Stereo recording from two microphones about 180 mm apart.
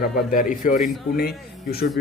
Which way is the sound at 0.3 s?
45° left (ahead or behind).